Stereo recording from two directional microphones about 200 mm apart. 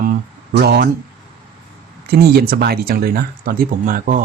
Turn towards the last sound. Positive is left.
turn(degrees=-45)  # may be behind; listen again after turning